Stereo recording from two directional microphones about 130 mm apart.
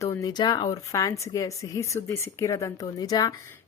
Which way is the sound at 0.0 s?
25° left (ahead or behind).